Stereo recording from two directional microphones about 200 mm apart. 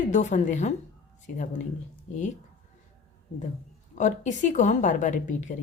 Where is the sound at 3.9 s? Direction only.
40° left (ahead or behind).